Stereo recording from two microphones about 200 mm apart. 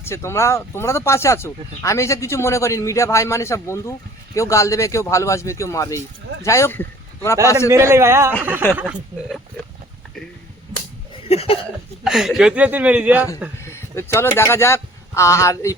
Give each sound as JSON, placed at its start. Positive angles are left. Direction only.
{"t": 0.0, "sound": "a man's voice", "side_deg": 15}
{"t": 7.7, "sound": "speech", "side_deg": -15}
{"t": 11.3, "sound": "a sound", "side_deg": 30}
{"t": 12.0, "sound": "speech", "side_deg": -5}
{"t": 13.6, "sound": "speech", "side_deg": 15}